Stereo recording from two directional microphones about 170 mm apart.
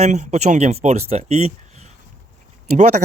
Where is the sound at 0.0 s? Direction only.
45° right (ahead or behind).